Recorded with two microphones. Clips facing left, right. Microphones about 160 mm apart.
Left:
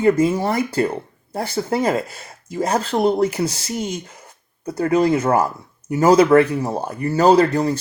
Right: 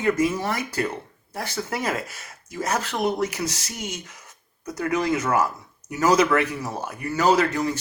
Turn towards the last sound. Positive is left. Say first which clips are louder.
# left 6 dB
turn(degrees=30)  # may be behind; listen again after turning